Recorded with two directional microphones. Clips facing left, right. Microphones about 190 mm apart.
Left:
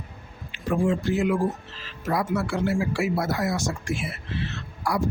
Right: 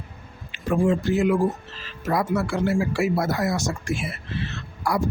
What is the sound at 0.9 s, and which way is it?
Speech, 45° right (ahead or behind).